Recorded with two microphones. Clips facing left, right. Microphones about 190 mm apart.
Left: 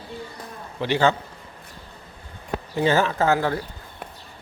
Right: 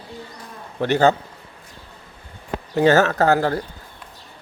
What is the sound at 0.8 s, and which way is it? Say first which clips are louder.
Speech: right 4 dB; 45° right (ahead or behind).